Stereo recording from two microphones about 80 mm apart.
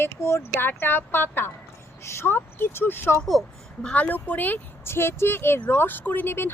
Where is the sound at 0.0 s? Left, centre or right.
Left.